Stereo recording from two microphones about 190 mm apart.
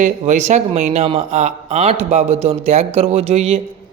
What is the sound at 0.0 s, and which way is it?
A man's voice, 40° right (ahead or behind).